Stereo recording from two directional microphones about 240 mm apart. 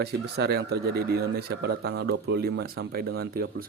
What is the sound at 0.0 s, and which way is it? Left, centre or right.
Speech, right.